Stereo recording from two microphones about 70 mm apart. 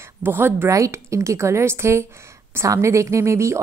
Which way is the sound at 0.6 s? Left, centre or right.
Right.